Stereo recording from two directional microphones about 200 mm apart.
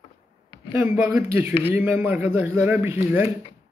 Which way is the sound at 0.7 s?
10° right (ahead or behind).